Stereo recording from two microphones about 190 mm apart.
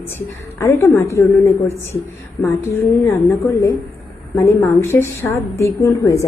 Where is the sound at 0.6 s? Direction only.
15° left (ahead or behind).